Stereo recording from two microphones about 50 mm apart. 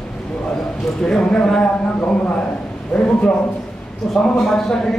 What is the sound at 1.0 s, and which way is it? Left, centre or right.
Speech, centre.